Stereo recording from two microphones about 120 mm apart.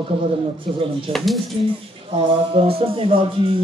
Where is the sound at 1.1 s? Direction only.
45° right (ahead or behind).